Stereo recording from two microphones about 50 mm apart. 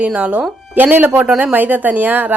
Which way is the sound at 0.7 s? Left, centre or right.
Right.